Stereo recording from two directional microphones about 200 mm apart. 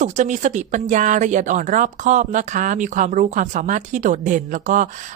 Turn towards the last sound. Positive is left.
turn(degrees=-40)  # may be behind; listen again after turning